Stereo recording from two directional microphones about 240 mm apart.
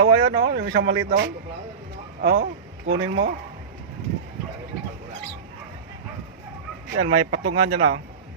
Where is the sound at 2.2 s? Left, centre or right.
Right.